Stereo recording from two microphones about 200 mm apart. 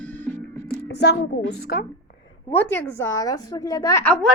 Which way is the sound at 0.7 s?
55° left (ahead or behind).